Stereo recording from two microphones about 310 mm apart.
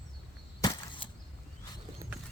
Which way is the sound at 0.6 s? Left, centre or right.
Centre.